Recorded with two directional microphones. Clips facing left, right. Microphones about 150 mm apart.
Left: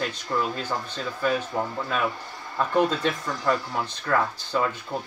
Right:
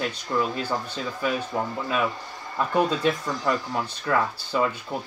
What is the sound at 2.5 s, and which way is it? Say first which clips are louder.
Speech: even; 10° right (ahead or behind).